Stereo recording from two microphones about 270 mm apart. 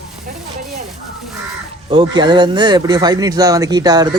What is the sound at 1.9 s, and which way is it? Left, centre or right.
Speech, centre.